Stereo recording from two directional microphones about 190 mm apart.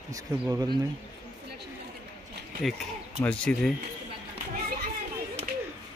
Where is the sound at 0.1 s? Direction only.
20° right (ahead or behind).